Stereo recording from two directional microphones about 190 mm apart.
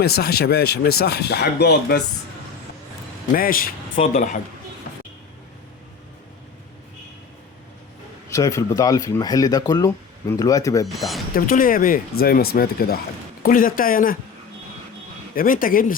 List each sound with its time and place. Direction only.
0.0 s speech: 55° left (ahead or behind)
3.3 s speech: 50° left (ahead or behind)
4.0 s speech: 35° left (ahead or behind)
8.3 s speech: 15° left (ahead or behind)
10.8 s speech: centre (ahead or behind)
11.3 s speech: 45° left (ahead or behind)
15.4 s speech: 45° left (ahead or behind)